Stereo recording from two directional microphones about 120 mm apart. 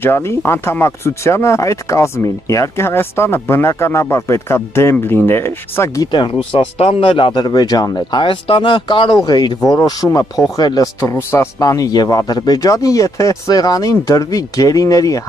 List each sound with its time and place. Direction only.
0.0 s speech: 20° left (ahead or behind)
6.8 s speech: 55° left (ahead or behind); by 15.2 s 30° left (ahead or behind)